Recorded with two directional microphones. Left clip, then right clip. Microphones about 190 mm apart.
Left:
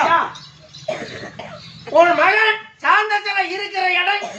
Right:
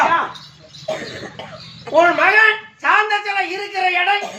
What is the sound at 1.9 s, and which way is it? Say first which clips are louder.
A woman's voice: right 1 dB; centre (ahead or behind).